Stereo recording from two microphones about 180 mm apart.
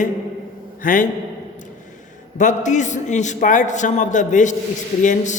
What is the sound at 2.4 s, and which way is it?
A man's voice, 40° left (ahead or behind).